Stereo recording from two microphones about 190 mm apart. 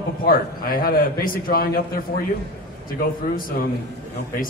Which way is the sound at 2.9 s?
50° left (ahead or behind).